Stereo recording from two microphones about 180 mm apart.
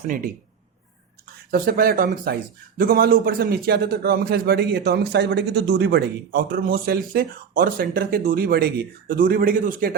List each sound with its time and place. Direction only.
1.5 s speech: 55° right (ahead or behind)